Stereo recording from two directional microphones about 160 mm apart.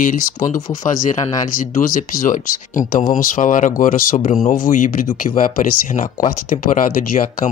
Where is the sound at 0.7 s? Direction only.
55° left (ahead or behind).